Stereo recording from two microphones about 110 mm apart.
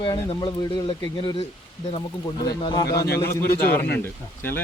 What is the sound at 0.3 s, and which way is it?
Speech, 50° left (ahead or behind).